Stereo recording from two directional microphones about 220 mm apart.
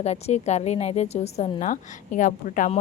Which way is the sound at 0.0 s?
30° left (ahead or behind).